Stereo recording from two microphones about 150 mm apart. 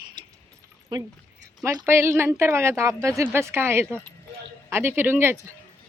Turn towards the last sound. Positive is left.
turn(degrees=-15)  # may be behind; listen again after turning